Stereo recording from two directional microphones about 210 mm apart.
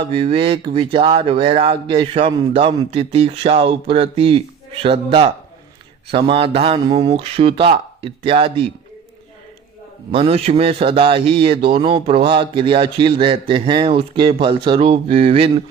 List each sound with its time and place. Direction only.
0.1 s a man's voice: 25° right (ahead or behind)
10.1 s a man's voice: 30° right (ahead or behind)